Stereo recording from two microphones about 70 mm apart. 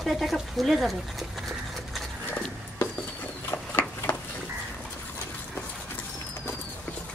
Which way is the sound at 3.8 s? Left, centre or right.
Left.